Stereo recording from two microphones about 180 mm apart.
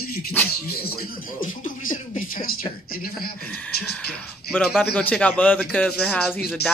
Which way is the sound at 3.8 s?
5° left (ahead or behind).